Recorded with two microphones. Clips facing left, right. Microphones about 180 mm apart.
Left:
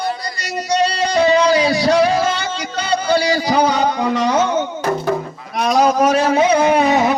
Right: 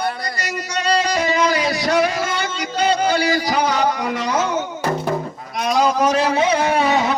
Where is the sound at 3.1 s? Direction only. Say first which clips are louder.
Left 3 dB; 30° left (ahead or behind).